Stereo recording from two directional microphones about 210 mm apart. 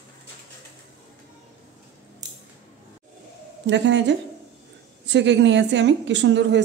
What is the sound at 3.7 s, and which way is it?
A woman's voice, 60° right (ahead or behind).